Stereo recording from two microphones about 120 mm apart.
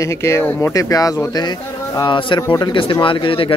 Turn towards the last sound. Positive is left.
turn(degrees=45)  # may be behind; listen again after turning